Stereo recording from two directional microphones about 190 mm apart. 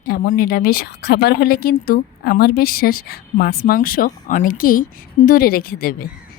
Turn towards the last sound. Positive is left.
turn(degrees=50)  # may be behind; listen again after turning